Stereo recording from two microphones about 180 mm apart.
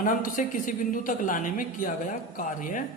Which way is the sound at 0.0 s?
50° left (ahead or behind).